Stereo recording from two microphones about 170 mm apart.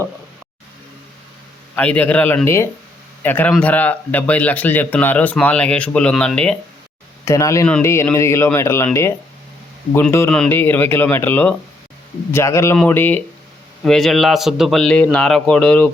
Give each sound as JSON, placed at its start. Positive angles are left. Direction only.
{"t": 1.7, "sound": "speech", "side_deg": 10}
{"t": 7.3, "sound": "speech", "side_deg": 20}
{"t": 10.2, "sound": "a man's voice", "side_deg": 5}